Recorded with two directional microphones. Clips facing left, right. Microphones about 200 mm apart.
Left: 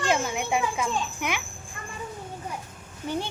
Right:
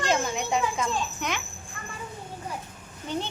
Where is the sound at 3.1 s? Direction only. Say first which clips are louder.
Left 1 dB; 10° left (ahead or behind).